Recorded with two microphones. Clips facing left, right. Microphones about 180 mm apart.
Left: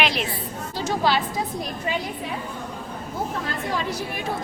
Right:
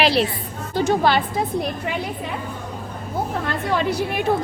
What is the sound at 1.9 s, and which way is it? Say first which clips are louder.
Speech: right 1 dB; 70° right (ahead or behind).